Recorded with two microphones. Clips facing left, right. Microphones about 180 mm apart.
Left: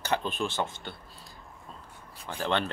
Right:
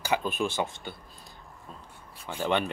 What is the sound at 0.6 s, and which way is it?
Speech, centre (ahead or behind).